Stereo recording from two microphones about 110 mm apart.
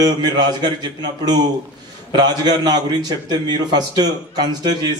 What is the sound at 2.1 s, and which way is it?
A man's voice, 40° right (ahead or behind).